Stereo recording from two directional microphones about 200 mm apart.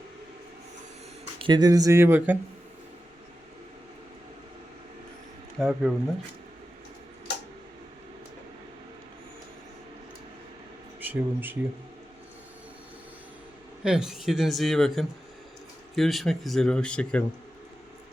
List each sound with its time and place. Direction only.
1.4 s speech: 20° right (ahead or behind)
5.5 s speech: centre (ahead or behind)
11.0 s speech: 10° right (ahead or behind)
13.8 s speech: 5° right (ahead or behind)